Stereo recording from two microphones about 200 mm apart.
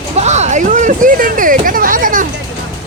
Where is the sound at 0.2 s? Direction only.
35° right (ahead or behind).